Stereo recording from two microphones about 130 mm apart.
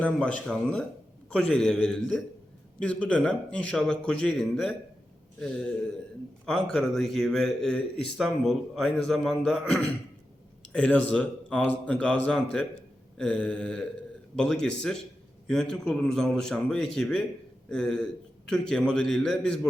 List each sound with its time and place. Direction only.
0.0 s a man's voice: 10° left (ahead or behind)